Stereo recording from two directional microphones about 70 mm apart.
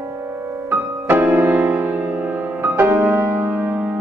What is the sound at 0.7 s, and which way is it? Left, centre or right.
Music, right.